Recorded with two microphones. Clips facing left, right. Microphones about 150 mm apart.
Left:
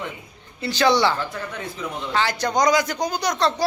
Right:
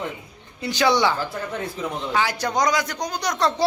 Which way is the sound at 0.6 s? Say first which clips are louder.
Left 1 dB; 15° right (ahead or behind).